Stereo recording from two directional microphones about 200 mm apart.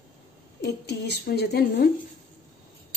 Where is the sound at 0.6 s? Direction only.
55° left (ahead or behind).